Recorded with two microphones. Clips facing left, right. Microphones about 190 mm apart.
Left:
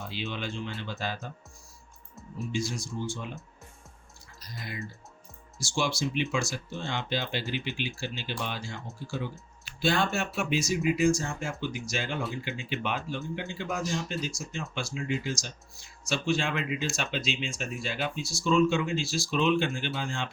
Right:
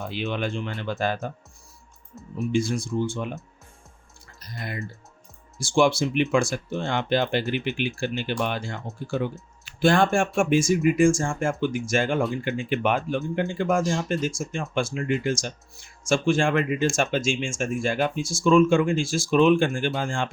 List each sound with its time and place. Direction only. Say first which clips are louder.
0.0 s speech: right 7 dB; 55° right (ahead or behind)
2.5 s speech: right 9 dB; 55° right (ahead or behind)
4.4 s speech: right 5 dB; 60° right (ahead or behind)